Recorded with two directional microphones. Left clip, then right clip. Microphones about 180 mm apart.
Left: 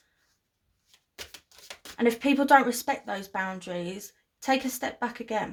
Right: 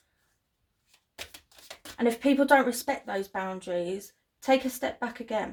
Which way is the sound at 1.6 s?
35° left (ahead or behind).